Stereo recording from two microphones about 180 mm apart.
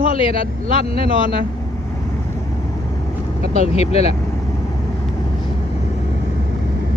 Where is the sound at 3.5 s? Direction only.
35° left (ahead or behind).